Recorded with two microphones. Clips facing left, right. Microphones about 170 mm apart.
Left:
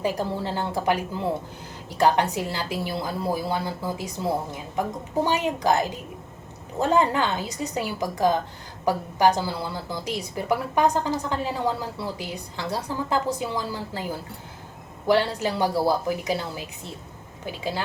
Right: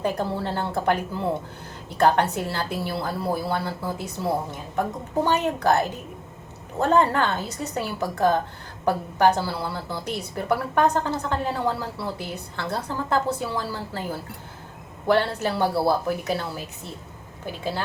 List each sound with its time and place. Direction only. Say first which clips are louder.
0.0 s speech: right 1 dB; 15° left (ahead or behind)